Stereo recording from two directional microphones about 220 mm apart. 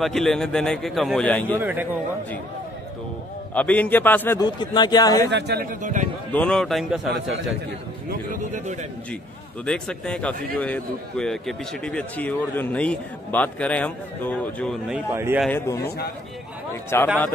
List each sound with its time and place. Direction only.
0.0 s a man's voice: centre (ahead or behind)
1.6 s a man's voice: 10° right (ahead or behind)
3.5 s a man's voice: 5° left (ahead or behind)
5.3 s a man's voice: 45° right (ahead or behind)
6.3 s a man's voice: 5° left (ahead or behind)
9.7 s a man's voice: 5° left (ahead or behind)
15.1 s a man's voice: 10° right (ahead or behind)
15.4 s a man's voice: 10° left (ahead or behind)
16.9 s a man's voice: 10° left (ahead or behind)